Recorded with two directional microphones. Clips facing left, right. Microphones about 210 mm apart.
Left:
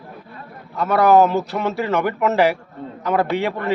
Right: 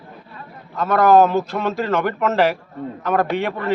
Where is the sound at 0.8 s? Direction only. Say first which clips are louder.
Even; 15° left (ahead or behind).